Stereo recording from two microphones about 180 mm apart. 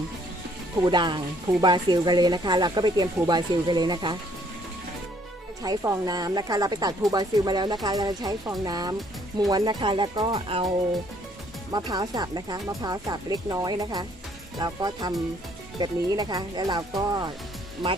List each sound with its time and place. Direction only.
0.8 s speech: 25° right (ahead or behind)
5.6 s speech: 20° right (ahead or behind)
11.7 s speech: 25° right (ahead or behind)